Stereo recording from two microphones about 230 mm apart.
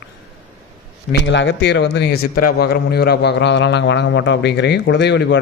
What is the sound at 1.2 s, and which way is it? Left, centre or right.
Speech, left.